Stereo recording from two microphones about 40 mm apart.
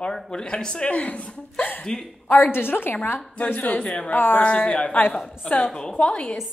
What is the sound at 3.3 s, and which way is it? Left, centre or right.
Speech, left.